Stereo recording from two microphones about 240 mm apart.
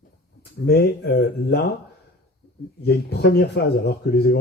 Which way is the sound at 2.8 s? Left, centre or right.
Left.